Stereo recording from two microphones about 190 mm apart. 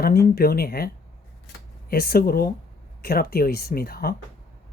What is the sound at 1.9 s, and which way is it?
Speech, 50° left (ahead or behind).